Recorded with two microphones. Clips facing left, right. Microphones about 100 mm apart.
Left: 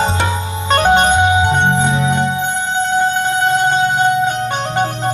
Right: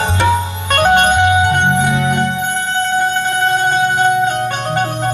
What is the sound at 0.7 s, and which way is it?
Music, 20° left (ahead or behind).